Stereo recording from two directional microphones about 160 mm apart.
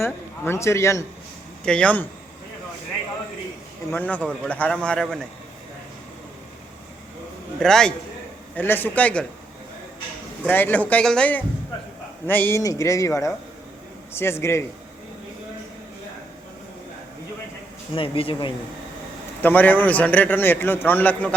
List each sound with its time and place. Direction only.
0.0 s a man's voice: 15° left (ahead or behind)
1.6 s a man's voice: 5° left (ahead or behind)
3.9 s a man's voice: 10° left (ahead or behind)
7.6 s a man's voice: 5° left (ahead or behind)
10.4 s a man's voice: 10° left (ahead or behind)
17.9 s speech: 35° left (ahead or behind)
19.4 s a man's voice: 10° left (ahead or behind)